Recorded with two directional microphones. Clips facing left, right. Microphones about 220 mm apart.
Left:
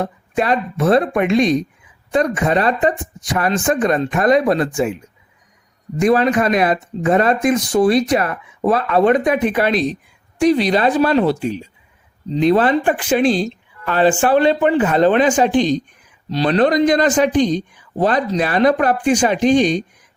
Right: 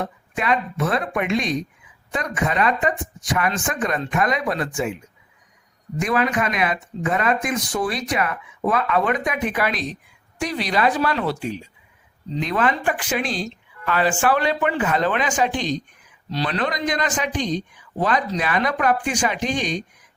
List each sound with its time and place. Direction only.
0.0 s speech: 35° left (ahead or behind)
6.0 s speech: 35° left (ahead or behind)